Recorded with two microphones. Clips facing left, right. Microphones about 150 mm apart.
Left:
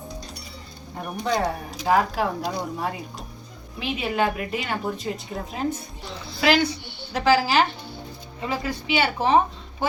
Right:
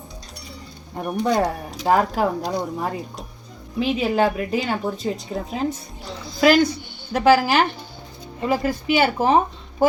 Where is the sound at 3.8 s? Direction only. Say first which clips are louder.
Right 5 dB; 35° right (ahead or behind).